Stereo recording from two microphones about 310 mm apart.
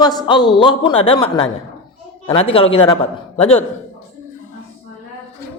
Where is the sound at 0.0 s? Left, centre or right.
Centre.